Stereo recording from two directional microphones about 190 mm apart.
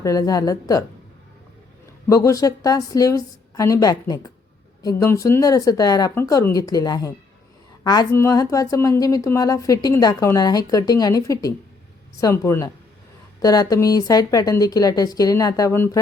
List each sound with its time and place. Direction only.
0.0 s a woman's voice: 20° left (ahead or behind)
2.0 s a woman's voice: 15° left (ahead or behind)